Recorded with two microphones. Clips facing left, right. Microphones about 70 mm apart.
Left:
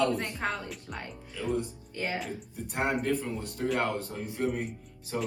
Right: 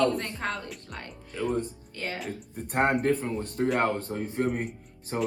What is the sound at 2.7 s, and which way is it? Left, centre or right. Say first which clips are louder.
Speech: right 5 dB; right.